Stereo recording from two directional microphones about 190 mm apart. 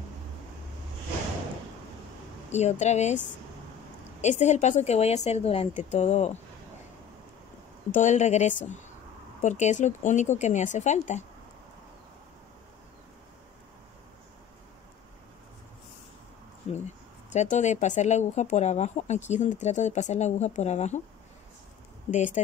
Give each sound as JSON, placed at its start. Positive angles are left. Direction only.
{"t": 2.5, "sound": "speech", "side_deg": 35}
{"t": 4.2, "sound": "speech", "side_deg": 40}
{"t": 7.9, "sound": "speech", "side_deg": 40}
{"t": 16.8, "sound": "speech", "side_deg": 40}
{"t": 22.1, "sound": "speech", "side_deg": 40}